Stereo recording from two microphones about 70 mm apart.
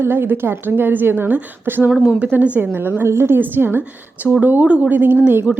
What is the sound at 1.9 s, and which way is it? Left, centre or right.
Speech, centre.